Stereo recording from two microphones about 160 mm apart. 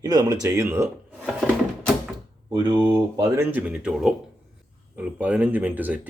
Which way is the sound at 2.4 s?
30° right (ahead or behind).